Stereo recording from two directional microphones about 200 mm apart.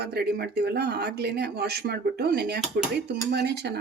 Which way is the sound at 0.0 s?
55° right (ahead or behind).